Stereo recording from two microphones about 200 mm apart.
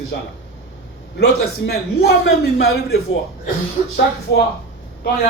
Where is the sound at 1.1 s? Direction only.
55° left (ahead or behind).